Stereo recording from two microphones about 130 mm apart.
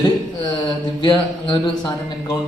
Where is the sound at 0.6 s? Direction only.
35° left (ahead or behind).